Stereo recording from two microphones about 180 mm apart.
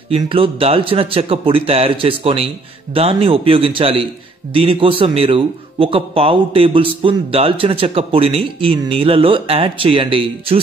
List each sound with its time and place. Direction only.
0.1 s a man's voice: 30° right (ahead or behind)